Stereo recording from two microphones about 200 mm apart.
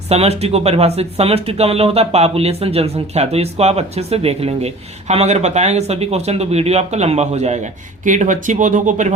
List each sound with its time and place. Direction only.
0.1 s speech: 30° right (ahead or behind)